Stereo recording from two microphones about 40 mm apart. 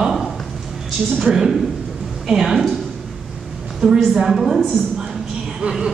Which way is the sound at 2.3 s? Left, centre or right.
Centre.